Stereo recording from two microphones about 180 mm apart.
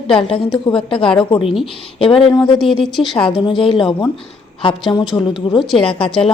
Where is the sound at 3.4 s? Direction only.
25° left (ahead or behind).